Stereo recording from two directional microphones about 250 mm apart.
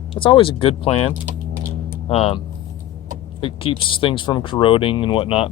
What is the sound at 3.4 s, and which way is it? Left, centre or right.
Speech, left.